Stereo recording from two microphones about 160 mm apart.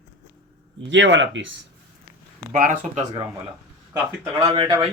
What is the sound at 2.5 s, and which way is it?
Speech, 55° right (ahead or behind).